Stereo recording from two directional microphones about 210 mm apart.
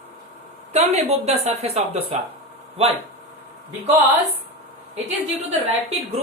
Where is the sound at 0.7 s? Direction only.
30° right (ahead or behind).